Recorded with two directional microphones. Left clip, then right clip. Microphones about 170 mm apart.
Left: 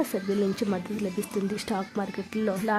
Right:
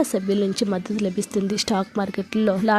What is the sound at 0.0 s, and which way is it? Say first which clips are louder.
A woman's voice: right 5 dB; 25° right (ahead or behind).